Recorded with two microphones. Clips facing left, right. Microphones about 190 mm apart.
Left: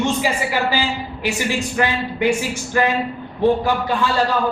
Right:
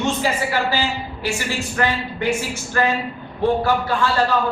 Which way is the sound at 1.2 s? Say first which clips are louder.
Left 3 dB; 15° left (ahead or behind).